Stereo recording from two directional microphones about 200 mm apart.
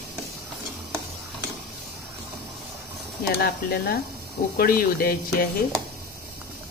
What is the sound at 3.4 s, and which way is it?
Speech, 50° left (ahead or behind).